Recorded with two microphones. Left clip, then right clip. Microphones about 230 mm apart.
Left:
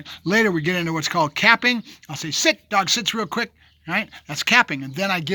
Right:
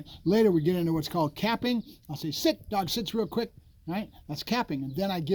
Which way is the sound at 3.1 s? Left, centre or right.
Left.